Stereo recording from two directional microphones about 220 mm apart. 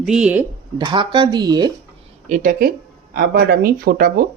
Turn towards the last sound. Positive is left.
turn(degrees=-40)  # may be behind; listen again after turning